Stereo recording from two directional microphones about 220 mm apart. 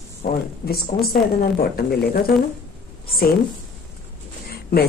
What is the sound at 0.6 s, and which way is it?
Speech, 45° left (ahead or behind).